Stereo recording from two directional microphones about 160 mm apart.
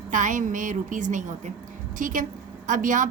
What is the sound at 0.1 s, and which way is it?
A woman's voice, 50° right (ahead or behind).